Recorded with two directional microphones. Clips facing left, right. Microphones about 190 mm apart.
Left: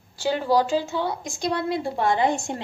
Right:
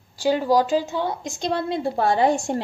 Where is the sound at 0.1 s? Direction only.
15° right (ahead or behind).